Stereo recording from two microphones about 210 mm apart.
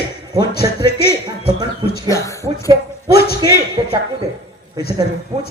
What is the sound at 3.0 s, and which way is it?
Speech, 50° left (ahead or behind).